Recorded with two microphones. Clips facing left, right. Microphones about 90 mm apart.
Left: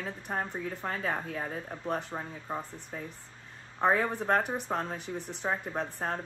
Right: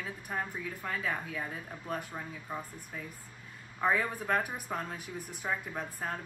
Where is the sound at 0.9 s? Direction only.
45° left (ahead or behind).